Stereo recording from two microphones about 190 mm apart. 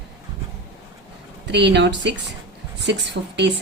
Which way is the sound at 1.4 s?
65° right (ahead or behind).